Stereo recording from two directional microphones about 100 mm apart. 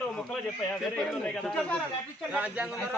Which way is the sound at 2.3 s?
15° right (ahead or behind).